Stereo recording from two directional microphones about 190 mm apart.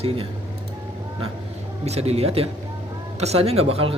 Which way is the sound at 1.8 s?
35° right (ahead or behind).